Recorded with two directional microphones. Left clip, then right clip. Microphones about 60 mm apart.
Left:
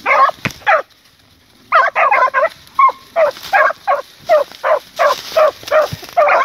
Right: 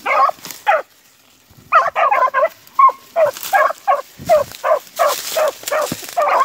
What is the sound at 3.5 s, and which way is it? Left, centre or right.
Turkey, centre.